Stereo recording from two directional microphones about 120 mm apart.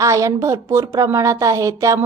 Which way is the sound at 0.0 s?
25° right (ahead or behind).